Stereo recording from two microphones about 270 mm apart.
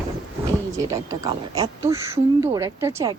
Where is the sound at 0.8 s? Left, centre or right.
Centre.